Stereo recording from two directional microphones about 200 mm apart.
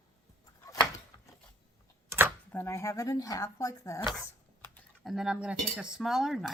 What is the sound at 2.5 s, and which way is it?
Speech, 10° left (ahead or behind).